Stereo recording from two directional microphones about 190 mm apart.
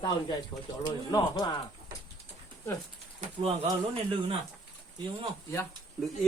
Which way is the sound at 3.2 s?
30° right (ahead or behind).